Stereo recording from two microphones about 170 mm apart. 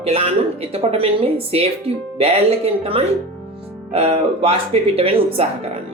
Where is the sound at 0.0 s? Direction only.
35° right (ahead or behind).